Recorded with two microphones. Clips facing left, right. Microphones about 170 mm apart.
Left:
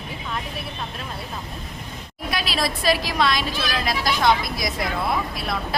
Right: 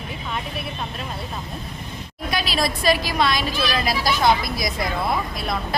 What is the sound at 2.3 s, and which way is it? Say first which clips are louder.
A woman's voice: right 2 dB; centre (ahead or behind).